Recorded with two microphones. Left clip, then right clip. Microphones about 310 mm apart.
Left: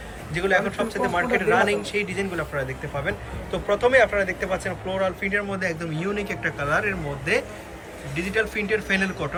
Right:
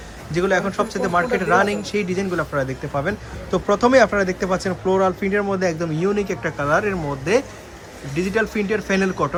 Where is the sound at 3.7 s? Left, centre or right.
Centre.